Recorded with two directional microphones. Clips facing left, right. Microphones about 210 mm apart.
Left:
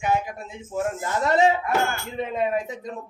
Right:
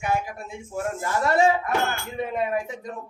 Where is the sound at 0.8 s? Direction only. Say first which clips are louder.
Left 1 dB; 20° left (ahead or behind).